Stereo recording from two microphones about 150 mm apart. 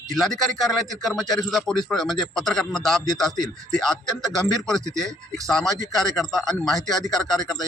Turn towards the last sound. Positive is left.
turn(degrees=0)  # may be behind; listen again after turning